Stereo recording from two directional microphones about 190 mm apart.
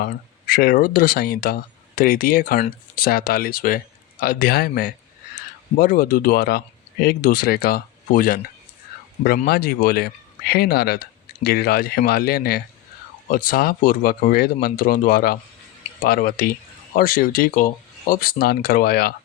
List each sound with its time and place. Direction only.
0.0 s speech: 50° left (ahead or behind)
9.5 s speech: 50° left (ahead or behind)